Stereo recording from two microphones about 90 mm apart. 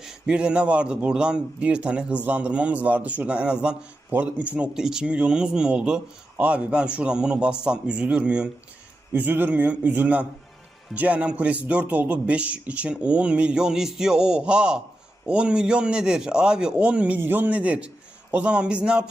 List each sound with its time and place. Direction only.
0.0 s a man's voice: 10° right (ahead or behind)